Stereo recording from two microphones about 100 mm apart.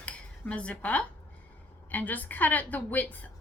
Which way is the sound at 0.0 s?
10° left (ahead or behind).